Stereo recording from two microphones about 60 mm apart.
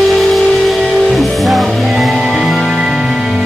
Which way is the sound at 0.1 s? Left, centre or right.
Centre.